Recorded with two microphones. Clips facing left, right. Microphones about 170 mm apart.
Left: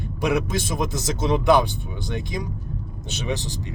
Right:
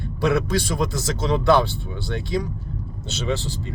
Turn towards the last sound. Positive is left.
turn(degrees=15)  # may be behind; listen again after turning